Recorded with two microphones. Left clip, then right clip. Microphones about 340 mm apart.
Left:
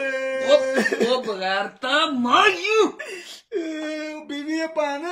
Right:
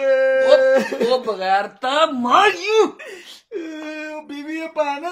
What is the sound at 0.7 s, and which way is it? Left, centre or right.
Cough, centre.